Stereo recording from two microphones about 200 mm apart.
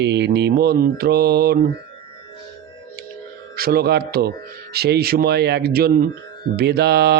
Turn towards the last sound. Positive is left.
turn(degrees=-55)  # may be behind; listen again after turning